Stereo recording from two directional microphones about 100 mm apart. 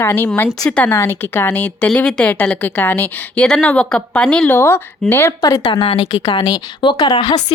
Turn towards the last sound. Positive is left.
turn(degrees=45)  # may be behind; listen again after turning